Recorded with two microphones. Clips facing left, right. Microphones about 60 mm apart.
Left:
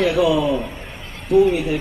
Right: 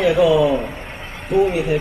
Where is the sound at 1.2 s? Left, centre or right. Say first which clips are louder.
Left 2 dB; right.